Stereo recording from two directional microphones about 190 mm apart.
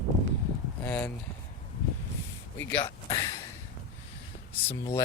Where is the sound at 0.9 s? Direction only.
10° left (ahead or behind).